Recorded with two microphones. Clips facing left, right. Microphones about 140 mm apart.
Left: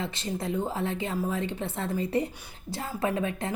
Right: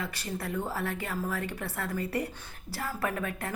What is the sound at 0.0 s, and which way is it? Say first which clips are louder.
A woman's voice: left 4 dB; 25° left (ahead or behind).